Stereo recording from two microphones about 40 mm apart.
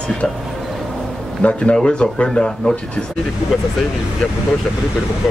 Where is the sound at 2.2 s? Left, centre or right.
Centre.